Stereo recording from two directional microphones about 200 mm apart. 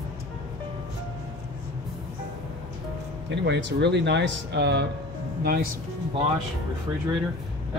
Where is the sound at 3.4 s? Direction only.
60° right (ahead or behind).